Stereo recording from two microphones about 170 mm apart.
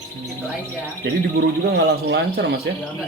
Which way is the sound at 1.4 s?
85° right.